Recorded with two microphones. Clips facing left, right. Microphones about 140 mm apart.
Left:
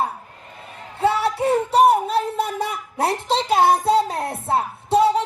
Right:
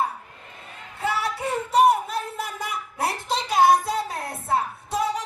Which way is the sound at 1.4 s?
30° left (ahead or behind).